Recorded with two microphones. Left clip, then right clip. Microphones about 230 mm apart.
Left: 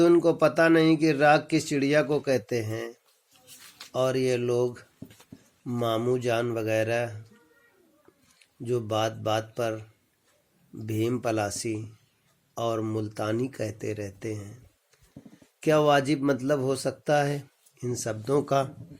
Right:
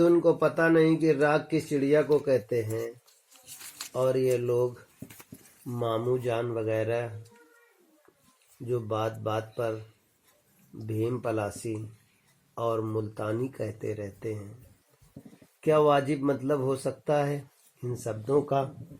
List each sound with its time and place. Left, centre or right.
0.0 s speech: left
3.9 s speech: left
8.7 s speech: left
10.8 s speech: left
12.5 s speech: left
15.6 s speech: left